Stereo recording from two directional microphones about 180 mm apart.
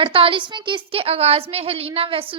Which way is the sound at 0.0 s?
30° right (ahead or behind).